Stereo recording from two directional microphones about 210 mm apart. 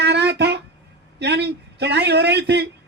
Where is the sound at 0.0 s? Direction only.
55° right (ahead or behind).